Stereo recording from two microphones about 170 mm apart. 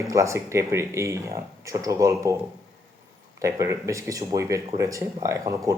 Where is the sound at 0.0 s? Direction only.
15° right (ahead or behind).